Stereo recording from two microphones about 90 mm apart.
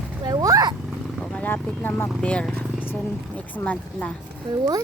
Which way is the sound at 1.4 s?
20° left (ahead or behind).